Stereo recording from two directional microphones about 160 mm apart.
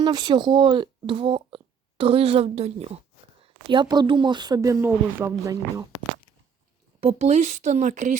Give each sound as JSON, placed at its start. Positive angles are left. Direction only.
{"t": 0.0, "sound": "speech", "side_deg": -25}
{"t": 7.0, "sound": "speech", "side_deg": -40}